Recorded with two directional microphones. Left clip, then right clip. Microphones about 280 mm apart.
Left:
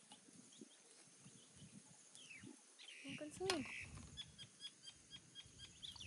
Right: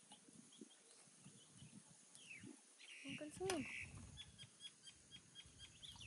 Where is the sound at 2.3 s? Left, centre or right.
Left.